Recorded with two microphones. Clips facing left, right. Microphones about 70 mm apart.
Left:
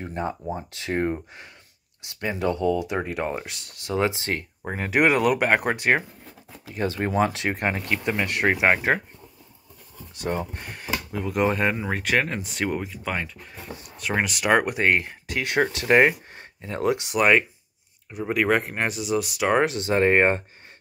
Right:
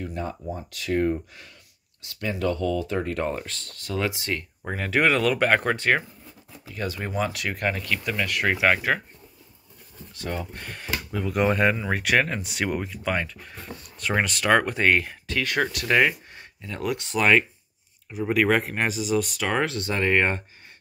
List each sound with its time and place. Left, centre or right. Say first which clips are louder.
0.0 s speech: left 2 dB; left; by 3.9 s centre
3.9 s speech: left 3 dB; left
7.0 s speech: left 6 dB; left
7.3 s speech: left 2 dB; left
10.2 s speech: left 4 dB; left
10.7 s speech: right 1 dB; centre; by 16.1 s left
16.1 s a sound: left 3 dB; left
16.9 s speech: even; centre
19.4 s speech: left 4 dB; centre
20.0 s speech: left 4 dB; left